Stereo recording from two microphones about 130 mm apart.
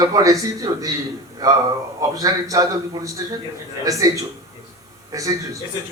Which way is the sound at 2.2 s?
25° right (ahead or behind).